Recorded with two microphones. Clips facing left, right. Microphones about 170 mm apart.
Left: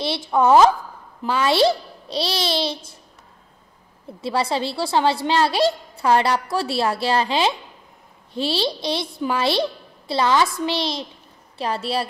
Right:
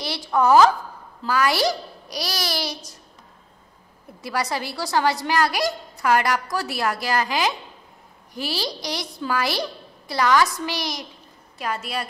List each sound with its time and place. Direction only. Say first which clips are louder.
0.0 s a woman's voice: left 2 dB; 25° left (ahead or behind)
4.2 s a woman's voice: left 4 dB; 25° left (ahead or behind)